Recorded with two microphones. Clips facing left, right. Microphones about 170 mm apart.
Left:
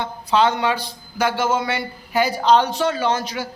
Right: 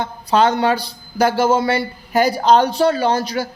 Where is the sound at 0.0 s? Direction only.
45° right (ahead or behind).